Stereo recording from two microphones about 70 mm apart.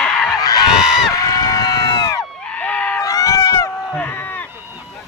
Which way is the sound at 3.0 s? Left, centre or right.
Left.